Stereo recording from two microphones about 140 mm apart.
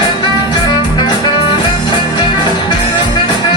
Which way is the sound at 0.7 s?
30° left (ahead or behind).